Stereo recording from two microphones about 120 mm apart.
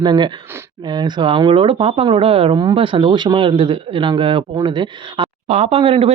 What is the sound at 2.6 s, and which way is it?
Speech, 40° right (ahead or behind).